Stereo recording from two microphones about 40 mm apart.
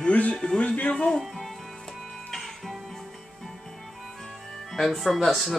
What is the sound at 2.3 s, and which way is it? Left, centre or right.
Music, centre.